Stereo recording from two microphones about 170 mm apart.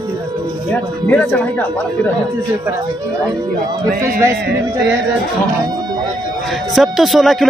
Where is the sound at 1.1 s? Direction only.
10° left (ahead or behind).